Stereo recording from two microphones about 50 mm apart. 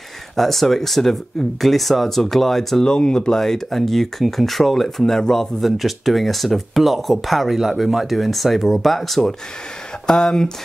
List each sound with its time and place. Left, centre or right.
0.4 s speech: centre